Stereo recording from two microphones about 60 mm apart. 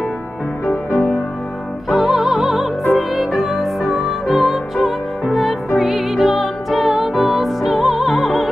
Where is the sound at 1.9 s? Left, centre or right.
Centre.